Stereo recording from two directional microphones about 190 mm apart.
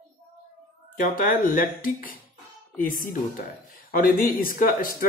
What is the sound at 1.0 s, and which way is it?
Speech, 45° left (ahead or behind).